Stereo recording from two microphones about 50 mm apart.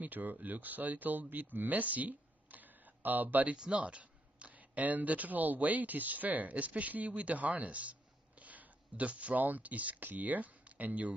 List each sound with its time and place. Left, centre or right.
0.0 s speech: right
3.5 s speech: right